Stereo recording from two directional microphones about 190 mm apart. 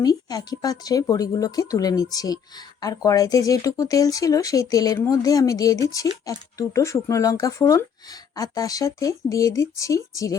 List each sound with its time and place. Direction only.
0.0 s speech: 20° left (ahead or behind)